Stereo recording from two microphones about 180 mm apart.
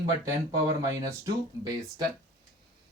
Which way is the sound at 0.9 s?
20° right (ahead or behind).